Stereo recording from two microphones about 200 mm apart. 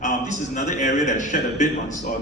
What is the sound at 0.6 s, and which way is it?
A man's voice, 40° left (ahead or behind).